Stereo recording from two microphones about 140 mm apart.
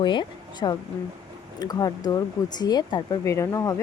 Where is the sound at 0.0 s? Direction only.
35° left (ahead or behind).